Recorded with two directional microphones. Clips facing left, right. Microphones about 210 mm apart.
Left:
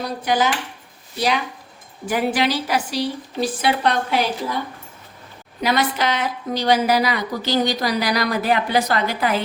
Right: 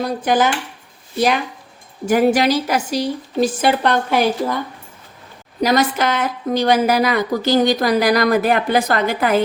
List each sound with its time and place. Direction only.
0.0 s a woman's voice: 50° right (ahead or behind)
2.0 s a woman's voice: 45° right (ahead or behind)
5.5 s a woman's voice: 40° right (ahead or behind)